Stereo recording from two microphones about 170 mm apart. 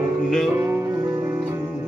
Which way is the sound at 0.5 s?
10° right (ahead or behind).